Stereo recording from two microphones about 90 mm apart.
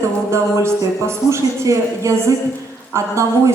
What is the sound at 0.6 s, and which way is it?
Speech, 30° right (ahead or behind).